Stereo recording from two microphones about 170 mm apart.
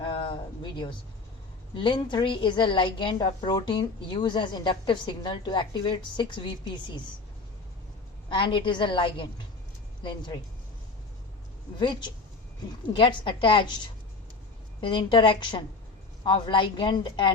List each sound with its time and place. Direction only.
0.0 s a sound: 30° left (ahead or behind)
1.7 s a woman's voice: 25° left (ahead or behind)
8.3 s a woman's voice: 30° left (ahead or behind)
11.8 s a woman's voice: 30° left (ahead or behind)